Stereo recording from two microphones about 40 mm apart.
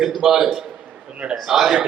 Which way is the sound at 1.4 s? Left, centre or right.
Centre.